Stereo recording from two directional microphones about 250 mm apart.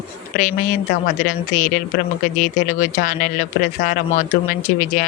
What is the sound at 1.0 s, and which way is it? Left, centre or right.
Speech, left.